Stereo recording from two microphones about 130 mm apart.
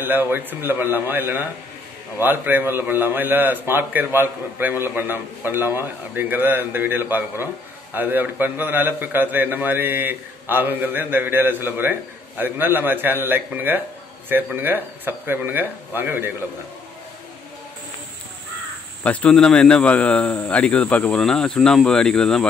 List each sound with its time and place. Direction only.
0.0 s a man's voice: 15° right (ahead or behind)
19.0 s speech: 5° left (ahead or behind)